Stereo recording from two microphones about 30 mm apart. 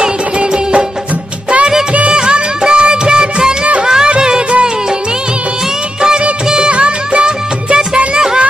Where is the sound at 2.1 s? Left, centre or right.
Right.